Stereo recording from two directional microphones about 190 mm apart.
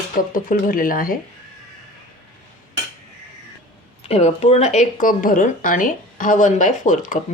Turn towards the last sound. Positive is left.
turn(degrees=45)  # may be behind; listen again after turning